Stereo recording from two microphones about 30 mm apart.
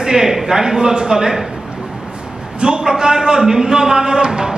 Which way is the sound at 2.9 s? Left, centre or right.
Centre.